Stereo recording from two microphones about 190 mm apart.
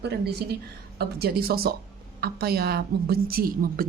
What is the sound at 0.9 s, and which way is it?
A woman's voice, 55° right (ahead or behind).